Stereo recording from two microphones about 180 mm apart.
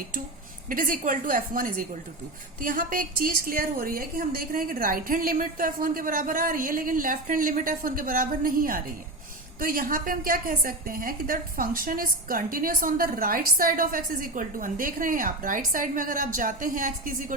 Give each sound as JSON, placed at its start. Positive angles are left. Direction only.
{"t": 0.7, "sound": "a woman's voice", "side_deg": -50}